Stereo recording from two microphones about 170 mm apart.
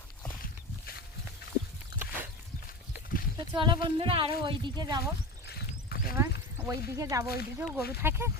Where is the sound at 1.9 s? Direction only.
65° left (ahead or behind).